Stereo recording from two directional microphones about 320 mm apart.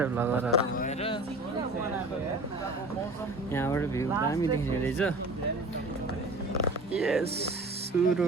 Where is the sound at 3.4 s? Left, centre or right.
Centre.